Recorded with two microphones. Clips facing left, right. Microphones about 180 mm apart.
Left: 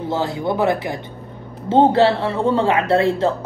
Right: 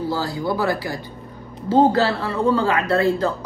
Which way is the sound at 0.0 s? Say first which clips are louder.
Left 2 dB; 25° left (ahead or behind).